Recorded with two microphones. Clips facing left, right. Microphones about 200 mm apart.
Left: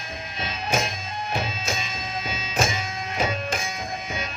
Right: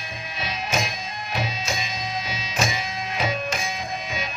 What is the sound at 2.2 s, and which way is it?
Music, 50° left (ahead or behind).